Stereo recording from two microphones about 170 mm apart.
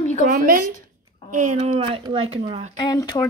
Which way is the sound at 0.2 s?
55° right (ahead or behind).